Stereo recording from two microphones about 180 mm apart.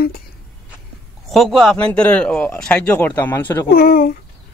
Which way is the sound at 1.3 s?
Centre (ahead or behind).